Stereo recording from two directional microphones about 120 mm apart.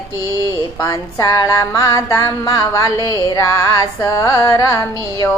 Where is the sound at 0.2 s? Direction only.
30° left (ahead or behind).